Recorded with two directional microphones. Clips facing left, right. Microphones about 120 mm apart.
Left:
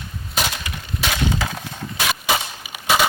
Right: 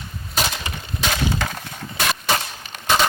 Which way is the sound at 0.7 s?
30° right (ahead or behind).